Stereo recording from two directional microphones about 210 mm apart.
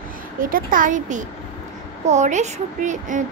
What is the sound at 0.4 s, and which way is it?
A woman's voice, 40° right (ahead or behind).